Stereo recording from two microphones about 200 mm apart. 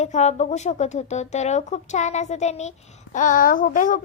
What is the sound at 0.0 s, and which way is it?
Speech, 35° left (ahead or behind).